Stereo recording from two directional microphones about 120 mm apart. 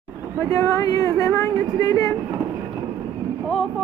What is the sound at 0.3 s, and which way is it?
Speech, 25° left (ahead or behind).